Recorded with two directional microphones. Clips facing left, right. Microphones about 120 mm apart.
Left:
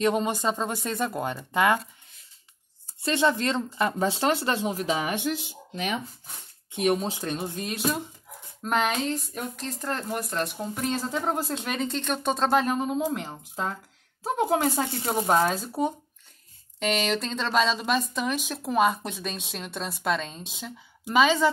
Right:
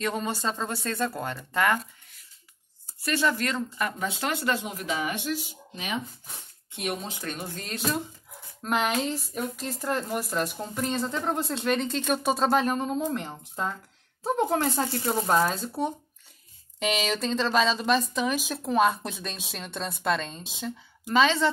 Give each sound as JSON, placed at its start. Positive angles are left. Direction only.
{"t": 0.0, "sound": "speech", "side_deg": 20}
{"t": 3.0, "sound": "speech", "side_deg": 25}
{"t": 7.2, "sound": "speech", "side_deg": 25}
{"t": 7.7, "sound": "speech", "side_deg": 5}